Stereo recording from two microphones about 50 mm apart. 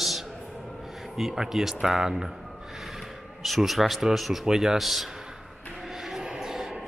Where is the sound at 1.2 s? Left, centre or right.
Centre.